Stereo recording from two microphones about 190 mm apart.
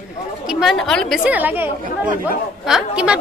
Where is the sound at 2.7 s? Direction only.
5° right (ahead or behind).